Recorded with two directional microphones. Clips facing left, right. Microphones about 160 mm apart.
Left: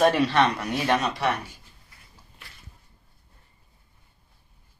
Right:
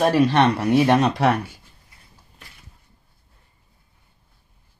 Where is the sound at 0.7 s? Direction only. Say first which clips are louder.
Right 9 dB; 20° right (ahead or behind).